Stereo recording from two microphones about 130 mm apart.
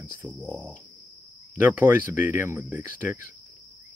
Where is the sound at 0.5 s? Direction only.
10° right (ahead or behind).